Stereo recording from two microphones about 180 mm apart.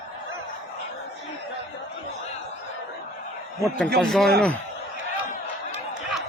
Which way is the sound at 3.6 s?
5° left (ahead or behind).